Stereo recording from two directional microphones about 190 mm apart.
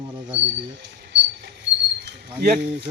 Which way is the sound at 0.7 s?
70° right (ahead or behind).